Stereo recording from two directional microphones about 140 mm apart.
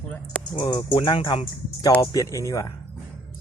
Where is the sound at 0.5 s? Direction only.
30° left (ahead or behind).